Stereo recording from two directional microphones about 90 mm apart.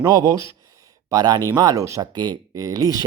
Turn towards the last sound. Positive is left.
turn(degrees=-45)  # may be behind; listen again after turning